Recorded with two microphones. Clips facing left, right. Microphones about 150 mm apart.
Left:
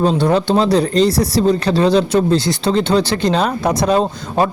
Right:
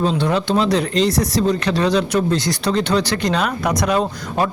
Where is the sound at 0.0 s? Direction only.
40° left (ahead or behind).